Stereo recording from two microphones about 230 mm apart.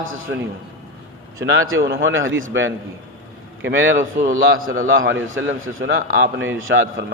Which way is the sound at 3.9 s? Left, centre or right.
Right.